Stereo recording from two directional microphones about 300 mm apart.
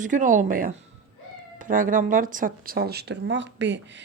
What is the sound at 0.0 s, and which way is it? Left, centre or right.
Speech, right.